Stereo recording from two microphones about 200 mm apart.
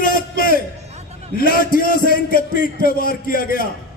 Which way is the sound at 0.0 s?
45° left (ahead or behind).